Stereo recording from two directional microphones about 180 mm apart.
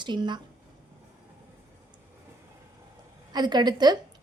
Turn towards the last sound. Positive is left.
turn(degrees=-25)  # may be behind; listen again after turning